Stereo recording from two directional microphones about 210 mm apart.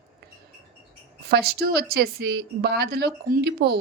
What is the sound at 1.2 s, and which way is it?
Speech, 50° right (ahead or behind).